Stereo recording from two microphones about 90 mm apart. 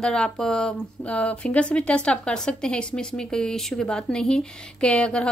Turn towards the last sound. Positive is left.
turn(degrees=10)  # may be behind; listen again after turning